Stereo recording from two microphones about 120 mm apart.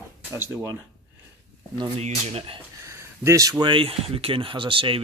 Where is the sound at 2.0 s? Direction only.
65° right (ahead or behind).